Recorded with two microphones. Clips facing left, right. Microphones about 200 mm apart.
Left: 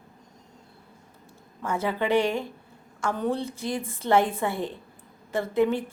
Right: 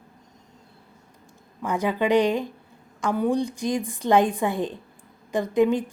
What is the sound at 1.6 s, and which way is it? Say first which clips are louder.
A woman's voice: right 3 dB; 15° right (ahead or behind).